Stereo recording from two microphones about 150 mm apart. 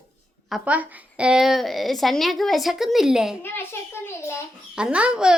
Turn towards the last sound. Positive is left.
turn(degrees=-5)  # may be behind; listen again after turning